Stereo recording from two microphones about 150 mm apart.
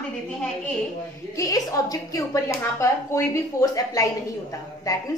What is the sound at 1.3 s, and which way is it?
Speech, 20° left (ahead or behind).